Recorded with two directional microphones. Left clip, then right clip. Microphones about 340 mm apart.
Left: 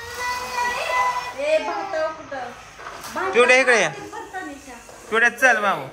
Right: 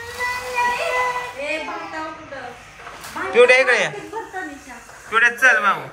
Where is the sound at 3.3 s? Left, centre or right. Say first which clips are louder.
Right 2 dB; centre.